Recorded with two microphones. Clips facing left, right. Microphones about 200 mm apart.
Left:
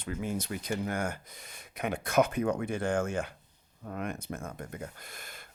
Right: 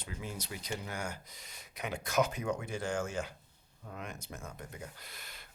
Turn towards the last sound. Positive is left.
turn(degrees=50)  # may be behind; listen again after turning